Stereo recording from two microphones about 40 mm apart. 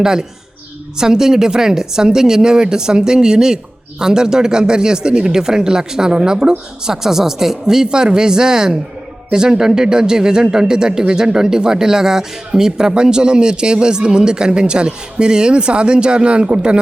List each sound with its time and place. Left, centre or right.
0.0 s a woman's voice: centre